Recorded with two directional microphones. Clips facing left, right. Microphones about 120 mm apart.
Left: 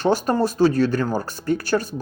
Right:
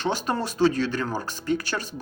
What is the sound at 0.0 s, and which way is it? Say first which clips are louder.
Speech: left 7 dB; 45° left (ahead or behind).